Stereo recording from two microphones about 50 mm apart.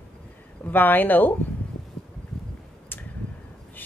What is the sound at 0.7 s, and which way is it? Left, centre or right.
Speech, left.